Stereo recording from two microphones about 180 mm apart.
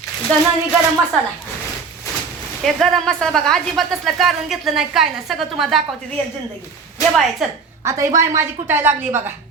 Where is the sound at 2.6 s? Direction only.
Centre (ahead or behind).